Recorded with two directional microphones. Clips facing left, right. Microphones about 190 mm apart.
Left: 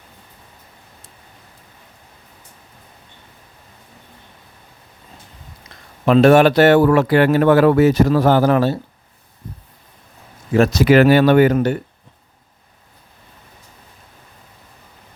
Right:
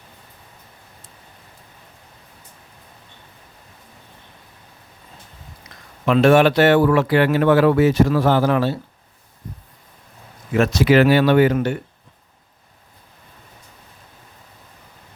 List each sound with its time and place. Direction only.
6.1 s speech: 40° left (ahead or behind)
10.5 s speech: 35° left (ahead or behind)